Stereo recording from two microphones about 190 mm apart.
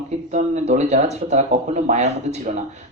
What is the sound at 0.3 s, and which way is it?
Speech, 40° right (ahead or behind).